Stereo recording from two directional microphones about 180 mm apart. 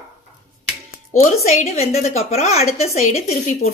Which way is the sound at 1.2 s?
40° left (ahead or behind).